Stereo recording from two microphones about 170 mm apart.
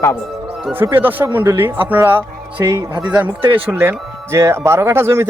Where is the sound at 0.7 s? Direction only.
10° right (ahead or behind).